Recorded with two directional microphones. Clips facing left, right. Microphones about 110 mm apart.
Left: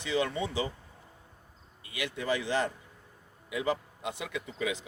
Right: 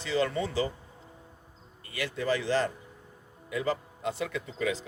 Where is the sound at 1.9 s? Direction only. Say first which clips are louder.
Right 2 dB; 15° left (ahead or behind).